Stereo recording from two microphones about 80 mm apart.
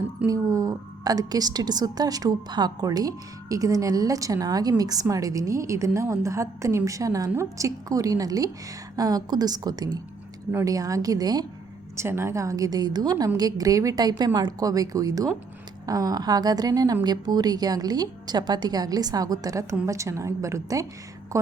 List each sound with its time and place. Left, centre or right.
0.3 s a woman's voice: right
10.5 s a woman's voice: right
11.9 s a woman's voice: right
19.8 s a woman's voice: right